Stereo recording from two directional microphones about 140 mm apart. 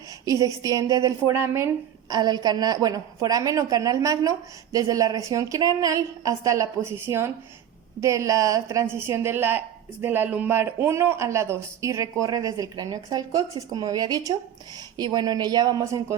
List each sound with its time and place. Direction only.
0.6 s a woman's voice: 25° right (ahead or behind)